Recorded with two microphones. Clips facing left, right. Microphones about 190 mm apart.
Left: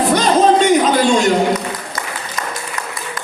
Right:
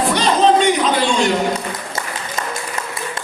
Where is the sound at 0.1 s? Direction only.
45° left (ahead or behind).